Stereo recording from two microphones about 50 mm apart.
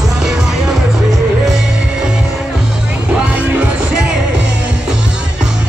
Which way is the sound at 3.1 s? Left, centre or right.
Right.